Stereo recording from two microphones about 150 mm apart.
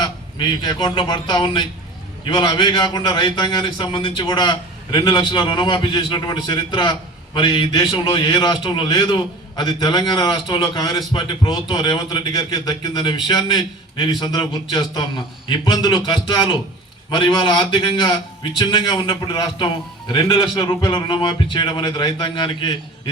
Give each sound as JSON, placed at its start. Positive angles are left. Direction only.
{"t": 0.0, "sound": "a man's voice", "side_deg": 30}